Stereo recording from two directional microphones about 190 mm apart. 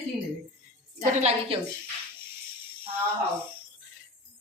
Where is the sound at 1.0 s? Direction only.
35° right (ahead or behind).